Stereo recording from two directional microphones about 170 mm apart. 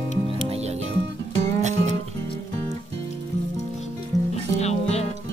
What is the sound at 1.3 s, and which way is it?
Music, 45° right (ahead or behind).